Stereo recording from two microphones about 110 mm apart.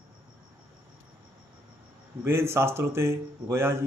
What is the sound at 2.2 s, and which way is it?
Speech, 25° right (ahead or behind).